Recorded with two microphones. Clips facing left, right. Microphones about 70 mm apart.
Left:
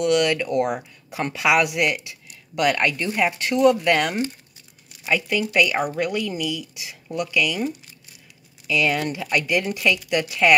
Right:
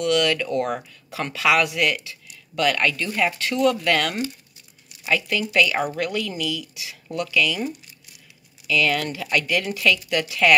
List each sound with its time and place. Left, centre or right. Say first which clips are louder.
0.0 s a woman's voice: left 1 dB; centre